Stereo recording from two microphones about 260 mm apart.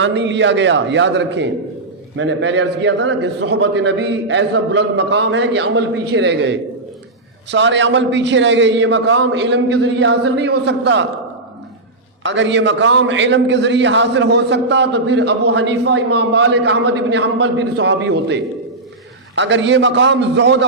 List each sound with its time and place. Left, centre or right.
0.0 s a man's voice: right
12.2 s a man's voice: right